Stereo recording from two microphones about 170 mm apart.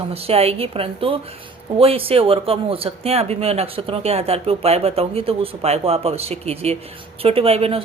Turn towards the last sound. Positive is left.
turn(degrees=-35)  # may be behind; listen again after turning